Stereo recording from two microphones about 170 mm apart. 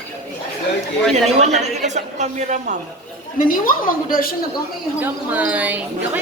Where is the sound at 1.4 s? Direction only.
45° right (ahead or behind).